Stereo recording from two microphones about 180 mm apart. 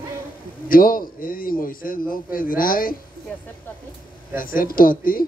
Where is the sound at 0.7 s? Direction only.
50° left (ahead or behind).